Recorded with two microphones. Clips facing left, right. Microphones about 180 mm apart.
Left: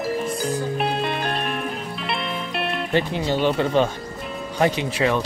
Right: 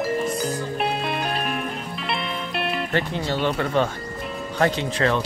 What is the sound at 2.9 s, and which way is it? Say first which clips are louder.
Speech: left 3 dB; 15° left (ahead or behind).